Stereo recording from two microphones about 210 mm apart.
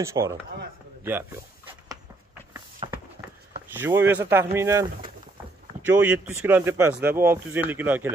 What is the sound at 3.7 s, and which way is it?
A man's voice, 10° right (ahead or behind).